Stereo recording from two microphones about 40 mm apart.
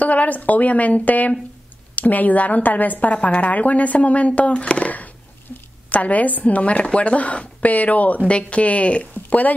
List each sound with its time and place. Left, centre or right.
0.0 s a woman's voice: left
3.2 s speech: left
5.5 s a sound: centre
5.9 s speech: left
8.3 s speech: left